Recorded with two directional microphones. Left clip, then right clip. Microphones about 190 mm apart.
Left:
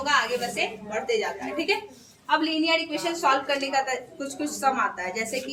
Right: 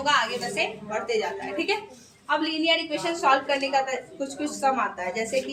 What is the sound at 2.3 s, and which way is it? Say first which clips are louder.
A woman's voice: even; 5° right (ahead or behind).